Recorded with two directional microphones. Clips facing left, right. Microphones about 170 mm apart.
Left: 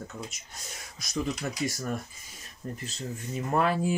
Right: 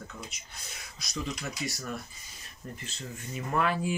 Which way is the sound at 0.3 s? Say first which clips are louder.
Left 2 dB; 45° left (ahead or behind).